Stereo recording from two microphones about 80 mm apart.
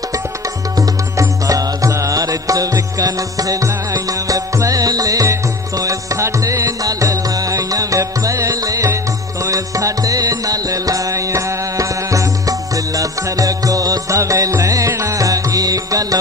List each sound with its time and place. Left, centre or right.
0.7 s music: right